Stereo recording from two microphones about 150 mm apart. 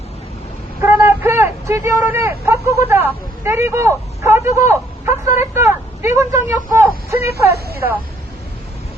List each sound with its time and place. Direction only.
0.8 s a man's voice: 15° right (ahead or behind)